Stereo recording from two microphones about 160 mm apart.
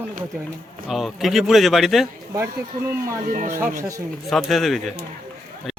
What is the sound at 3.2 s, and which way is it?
Speech, 60° right (ahead or behind).